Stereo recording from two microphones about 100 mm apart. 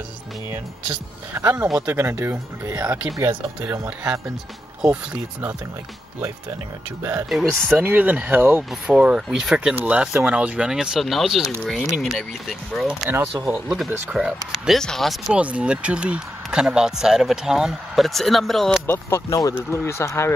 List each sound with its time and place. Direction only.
0.5 s speech: 20° right (ahead or behind)
7.2 s speech: centre (ahead or behind)
7.7 s speech: 20° right (ahead or behind)
13.0 s speech: 20° right (ahead or behind)
13.7 s speech: 5° right (ahead or behind)
15.3 s speech: 10° right (ahead or behind)
18.9 s speech: 25° left (ahead or behind)